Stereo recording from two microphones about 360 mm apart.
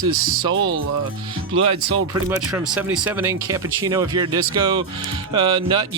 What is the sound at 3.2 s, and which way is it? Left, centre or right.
Speech, centre.